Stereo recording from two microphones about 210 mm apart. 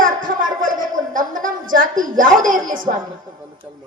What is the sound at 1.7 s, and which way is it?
A woman's voice, 40° right (ahead or behind).